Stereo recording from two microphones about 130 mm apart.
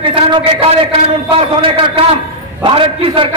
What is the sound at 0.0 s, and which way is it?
A man's voice, 45° right (ahead or behind).